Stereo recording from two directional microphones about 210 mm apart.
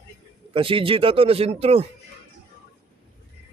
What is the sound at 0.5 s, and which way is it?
Speech, 25° right (ahead or behind).